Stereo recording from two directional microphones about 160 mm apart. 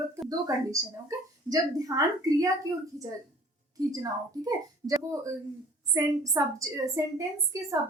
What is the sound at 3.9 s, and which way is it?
A woman's voice, 20° right (ahead or behind).